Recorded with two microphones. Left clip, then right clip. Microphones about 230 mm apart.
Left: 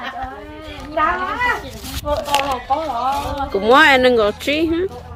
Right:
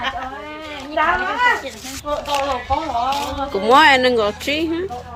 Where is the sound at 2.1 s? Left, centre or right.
Centre.